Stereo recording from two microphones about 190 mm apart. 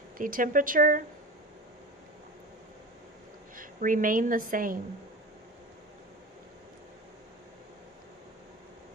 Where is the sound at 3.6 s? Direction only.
45° right (ahead or behind).